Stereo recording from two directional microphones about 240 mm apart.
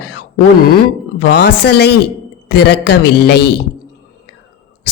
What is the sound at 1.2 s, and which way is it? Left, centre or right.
A woman's voice, left.